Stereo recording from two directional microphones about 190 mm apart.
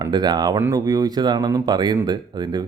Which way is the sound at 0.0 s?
20° right (ahead or behind).